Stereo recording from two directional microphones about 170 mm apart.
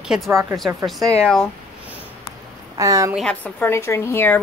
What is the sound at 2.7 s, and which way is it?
Speech, 20° right (ahead or behind).